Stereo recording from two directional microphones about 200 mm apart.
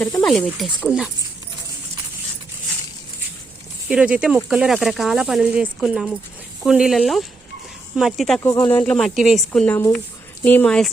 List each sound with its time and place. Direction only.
0.0 s speech: centre (ahead or behind)
3.8 s speech: 5° right (ahead or behind)
8.4 s speech: 20° left (ahead or behind)
8.8 s speech: 5° left (ahead or behind)